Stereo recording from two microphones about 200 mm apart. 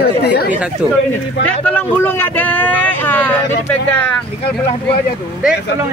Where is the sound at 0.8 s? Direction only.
5° right (ahead or behind).